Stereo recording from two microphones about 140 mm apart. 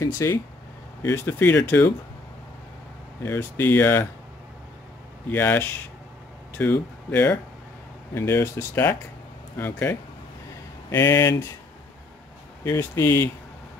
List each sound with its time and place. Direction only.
0.0 s speech: 20° left (ahead or behind)
3.3 s speech: 15° left (ahead or behind)
5.3 s speech: 15° left (ahead or behind)
12.6 s speech: 20° left (ahead or behind)